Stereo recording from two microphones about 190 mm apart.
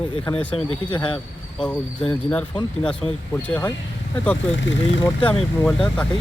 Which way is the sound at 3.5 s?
10° left (ahead or behind).